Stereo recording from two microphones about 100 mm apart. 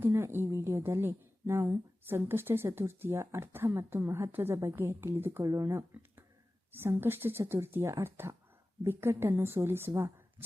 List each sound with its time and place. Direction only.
0.0 s a woman's voice: 25° right (ahead or behind)
5.4 s a woman's voice: 35° right (ahead or behind)